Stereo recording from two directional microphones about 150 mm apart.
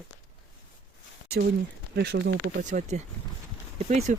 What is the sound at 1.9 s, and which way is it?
Speech, 90° right.